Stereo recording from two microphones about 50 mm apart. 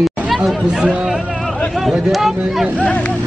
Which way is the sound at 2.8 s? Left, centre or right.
Left.